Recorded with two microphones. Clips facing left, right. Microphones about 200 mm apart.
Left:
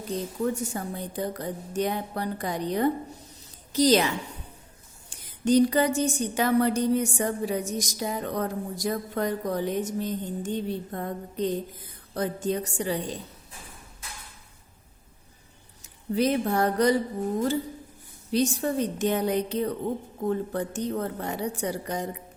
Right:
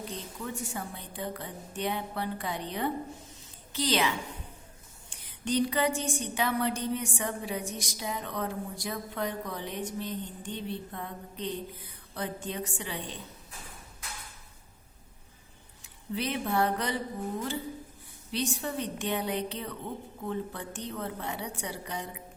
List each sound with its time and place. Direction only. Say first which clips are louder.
0.4 s a woman's voice: left 7 dB; 40° left (ahead or behind)
5.0 s a sound: left 9 dB; 40° left (ahead or behind)
15.8 s speech: left 9 dB; 40° left (ahead or behind)
18.3 s a woman's voice: left 8 dB; 40° left (ahead or behind)